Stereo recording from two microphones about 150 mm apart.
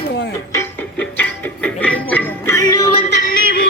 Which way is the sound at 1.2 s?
10° left (ahead or behind).